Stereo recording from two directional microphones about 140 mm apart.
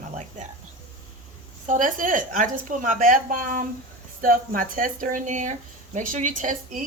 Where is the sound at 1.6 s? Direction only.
65° right (ahead or behind).